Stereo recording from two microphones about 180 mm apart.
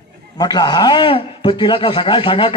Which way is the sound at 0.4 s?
20° left (ahead or behind).